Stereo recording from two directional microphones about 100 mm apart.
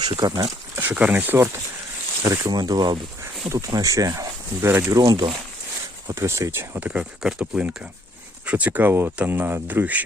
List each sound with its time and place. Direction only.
0.0 s speech: 40° right (ahead or behind)
0.8 s speech: 15° right (ahead or behind)
2.5 s speech: 45° right (ahead or behind); by 10.0 s 15° right (ahead or behind)